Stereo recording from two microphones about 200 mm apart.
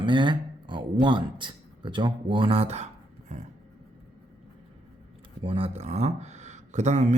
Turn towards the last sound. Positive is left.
turn(degrees=-35)  # may be behind; listen again after turning